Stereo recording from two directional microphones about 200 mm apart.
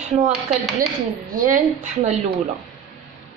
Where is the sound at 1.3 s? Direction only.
40° right (ahead or behind).